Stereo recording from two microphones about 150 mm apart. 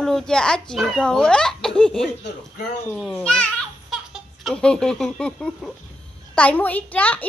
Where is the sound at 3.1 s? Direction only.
5° left (ahead or behind).